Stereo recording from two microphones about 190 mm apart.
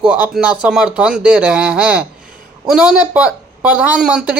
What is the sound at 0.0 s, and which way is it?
Speech, 5° right (ahead or behind).